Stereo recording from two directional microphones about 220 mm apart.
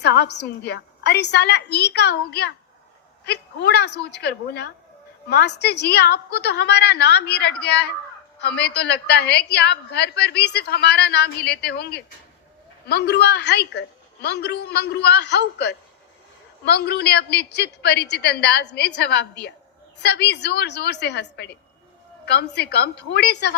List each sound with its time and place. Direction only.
0.0 s a woman's voice: 50° left (ahead or behind)